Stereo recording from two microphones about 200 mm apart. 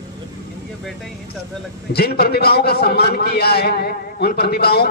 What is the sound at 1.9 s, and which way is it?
A man's voice, 50° left (ahead or behind).